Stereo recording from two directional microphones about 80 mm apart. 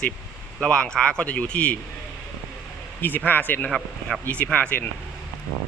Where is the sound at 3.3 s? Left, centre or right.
Left.